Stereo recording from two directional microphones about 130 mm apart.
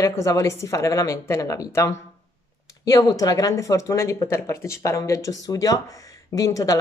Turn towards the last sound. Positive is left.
turn(degrees=25)  # may be behind; listen again after turning